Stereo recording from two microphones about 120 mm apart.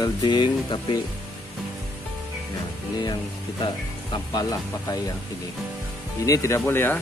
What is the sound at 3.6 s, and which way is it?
Speech, 40° left (ahead or behind).